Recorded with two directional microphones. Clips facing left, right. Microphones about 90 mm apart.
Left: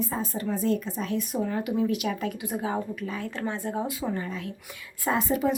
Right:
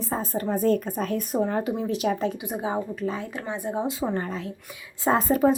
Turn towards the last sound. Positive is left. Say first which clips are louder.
# right 5 dB
turn(degrees=-40)  # may be behind; listen again after turning